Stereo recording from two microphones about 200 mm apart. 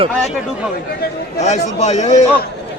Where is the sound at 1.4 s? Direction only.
35° left (ahead or behind).